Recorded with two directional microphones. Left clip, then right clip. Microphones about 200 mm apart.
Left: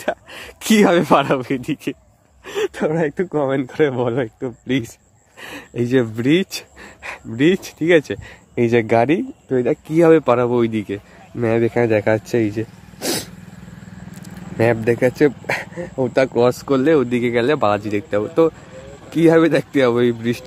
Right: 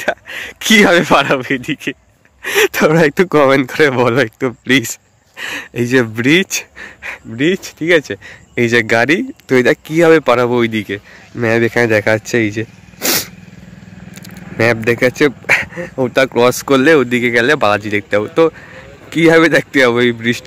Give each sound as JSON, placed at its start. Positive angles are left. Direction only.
{"t": 0.0, "sound": "speech", "side_deg": 0}
{"t": 2.4, "sound": "speech", "side_deg": -15}
{"t": 3.4, "sound": "speech", "side_deg": -15}
{"t": 7.0, "sound": "speech", "side_deg": 10}
{"t": 14.6, "sound": "speech", "side_deg": 0}